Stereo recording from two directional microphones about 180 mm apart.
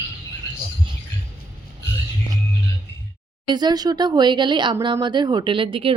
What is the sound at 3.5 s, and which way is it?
Speech, 25° right (ahead or behind).